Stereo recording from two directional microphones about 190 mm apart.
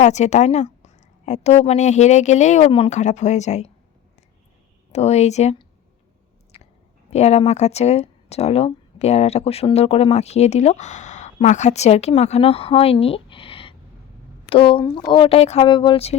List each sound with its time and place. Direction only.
0.0 s speech: 35° left (ahead or behind)
4.9 s speech: 35° left (ahead or behind)
7.1 s speech: 35° left (ahead or behind)